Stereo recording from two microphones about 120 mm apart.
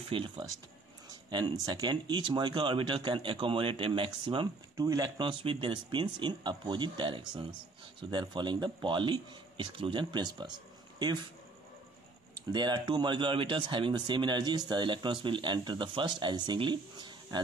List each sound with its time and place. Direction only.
0.1 s speech: 45° right (ahead or behind)
4.7 s speech: 30° right (ahead or behind)
5.4 s speech: 45° right (ahead or behind)
12.5 s speech: 40° right (ahead or behind)